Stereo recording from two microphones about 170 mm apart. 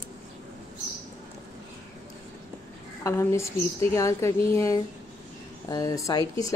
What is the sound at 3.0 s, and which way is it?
A woman's voice, 15° left (ahead or behind).